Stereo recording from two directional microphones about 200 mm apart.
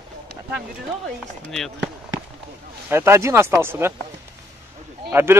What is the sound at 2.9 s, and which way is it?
Speech, 10° right (ahead or behind).